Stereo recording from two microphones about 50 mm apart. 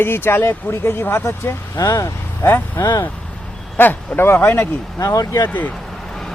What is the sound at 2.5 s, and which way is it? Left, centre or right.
Speech, left.